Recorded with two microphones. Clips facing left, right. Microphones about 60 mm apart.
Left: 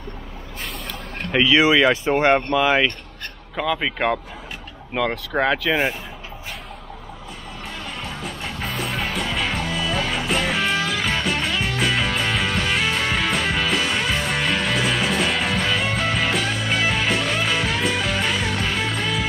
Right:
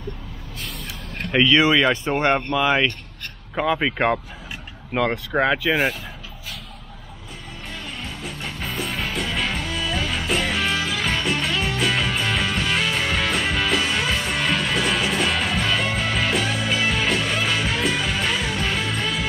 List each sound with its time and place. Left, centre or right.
0.6 s vehicle: left
1.3 s speech: centre
3.5 s speech: centre
8.2 s music: centre